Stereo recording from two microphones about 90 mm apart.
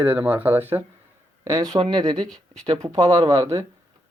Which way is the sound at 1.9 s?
50° right (ahead or behind).